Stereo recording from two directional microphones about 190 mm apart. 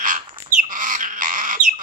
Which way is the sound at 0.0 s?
45° right (ahead or behind).